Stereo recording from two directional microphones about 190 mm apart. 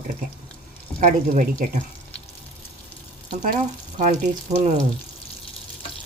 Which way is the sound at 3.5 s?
40° right (ahead or behind).